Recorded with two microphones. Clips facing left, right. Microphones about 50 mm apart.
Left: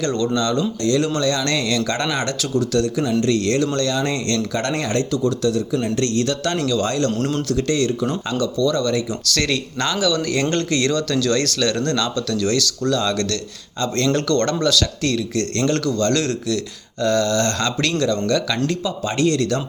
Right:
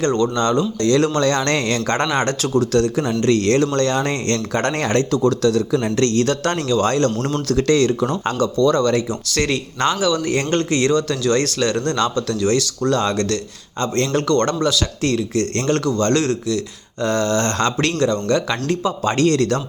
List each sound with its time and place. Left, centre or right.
0.0 s speech: right
0.8 s speech: right
9.2 s speech: right